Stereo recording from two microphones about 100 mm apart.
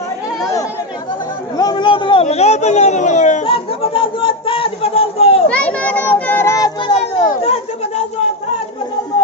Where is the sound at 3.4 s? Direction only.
60° left (ahead or behind).